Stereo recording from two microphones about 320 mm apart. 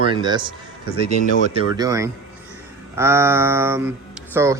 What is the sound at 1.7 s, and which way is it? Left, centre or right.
Speech, centre.